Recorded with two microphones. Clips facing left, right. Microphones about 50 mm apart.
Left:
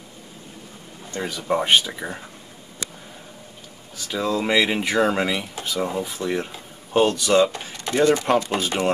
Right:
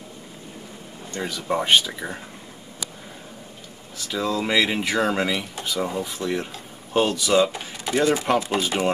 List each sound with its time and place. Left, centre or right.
1.2 s speech: centre
4.1 s speech: centre